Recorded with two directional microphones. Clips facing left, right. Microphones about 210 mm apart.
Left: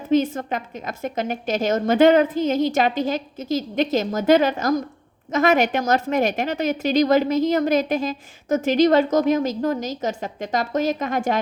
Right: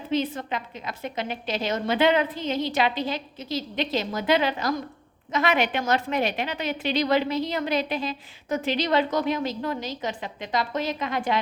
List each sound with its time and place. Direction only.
0.1 s a woman's voice: 45° left (ahead or behind)